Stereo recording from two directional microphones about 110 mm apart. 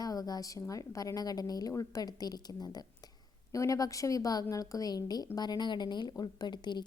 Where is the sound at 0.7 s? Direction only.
30° left (ahead or behind).